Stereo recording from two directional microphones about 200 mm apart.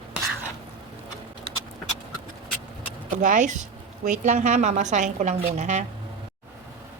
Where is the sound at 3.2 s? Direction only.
40° right (ahead or behind).